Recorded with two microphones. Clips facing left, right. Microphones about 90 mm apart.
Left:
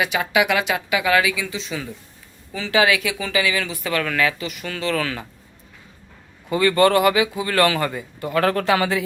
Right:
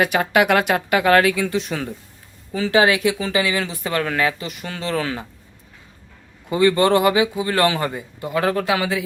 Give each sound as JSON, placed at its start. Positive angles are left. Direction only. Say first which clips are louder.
{"t": 0.0, "sound": "speech", "louder": "right 3 dB", "side_deg": -50}
{"t": 2.5, "sound": "speech", "louder": "right 2 dB", "side_deg": -35}
{"t": 6.5, "sound": "a man's voice", "louder": "right 1 dB", "side_deg": -20}